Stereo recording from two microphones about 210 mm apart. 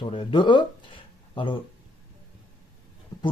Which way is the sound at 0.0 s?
25° left (ahead or behind).